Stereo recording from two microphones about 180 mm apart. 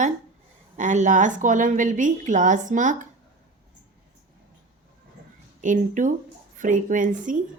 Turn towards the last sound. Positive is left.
turn(degrees=-45)  # may be behind; listen again after turning